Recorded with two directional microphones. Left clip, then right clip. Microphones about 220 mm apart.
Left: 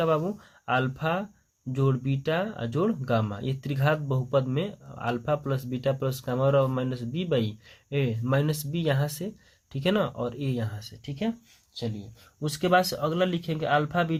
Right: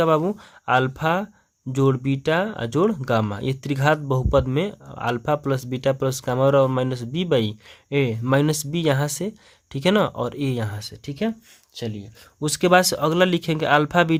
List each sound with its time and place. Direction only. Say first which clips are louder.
0.0 s speech: right 6 dB; 35° right (ahead or behind)
12.4 s speech: right 6 dB; 40° right (ahead or behind)